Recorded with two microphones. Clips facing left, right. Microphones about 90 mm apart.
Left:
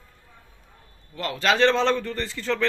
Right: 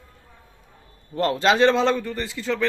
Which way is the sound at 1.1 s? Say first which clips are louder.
Right 8 dB; 40° right (ahead or behind).